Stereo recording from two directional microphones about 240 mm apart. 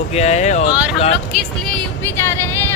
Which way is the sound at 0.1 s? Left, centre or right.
Left.